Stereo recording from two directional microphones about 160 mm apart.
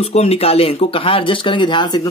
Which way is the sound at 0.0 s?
40° left (ahead or behind).